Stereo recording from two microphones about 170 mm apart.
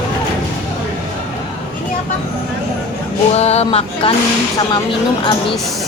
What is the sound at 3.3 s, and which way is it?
Speech, 40° left (ahead or behind).